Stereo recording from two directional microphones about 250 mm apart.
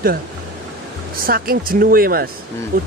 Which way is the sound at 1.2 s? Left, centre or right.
Right.